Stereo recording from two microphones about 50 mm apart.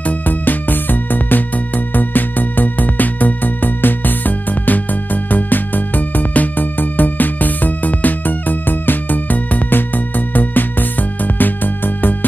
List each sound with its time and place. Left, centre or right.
0.3 s music: left